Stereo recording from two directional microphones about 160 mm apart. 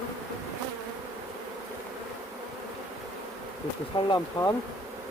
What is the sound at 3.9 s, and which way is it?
Speech, 35° left (ahead or behind).